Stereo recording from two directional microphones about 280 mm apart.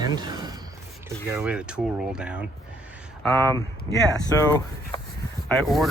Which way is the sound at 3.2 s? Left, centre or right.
Centre.